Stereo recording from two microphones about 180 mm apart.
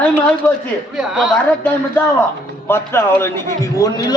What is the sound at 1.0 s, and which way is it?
Speech, 5° right (ahead or behind).